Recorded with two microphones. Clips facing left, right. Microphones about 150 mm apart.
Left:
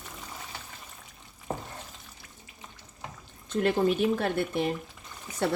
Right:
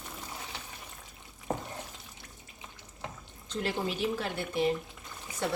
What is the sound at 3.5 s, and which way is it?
A woman's voice, 55° left (ahead or behind).